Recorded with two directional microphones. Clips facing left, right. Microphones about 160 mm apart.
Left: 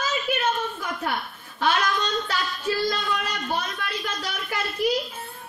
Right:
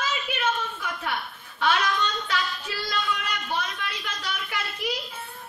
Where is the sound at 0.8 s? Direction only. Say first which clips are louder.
Left 3 dB; 40° left (ahead or behind).